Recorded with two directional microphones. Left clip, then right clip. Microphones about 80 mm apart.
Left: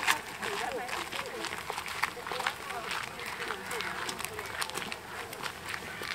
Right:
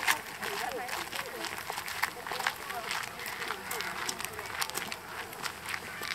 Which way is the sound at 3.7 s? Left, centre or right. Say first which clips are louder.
Even; right.